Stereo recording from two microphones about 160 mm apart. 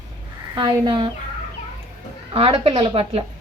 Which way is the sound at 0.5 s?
30° right (ahead or behind).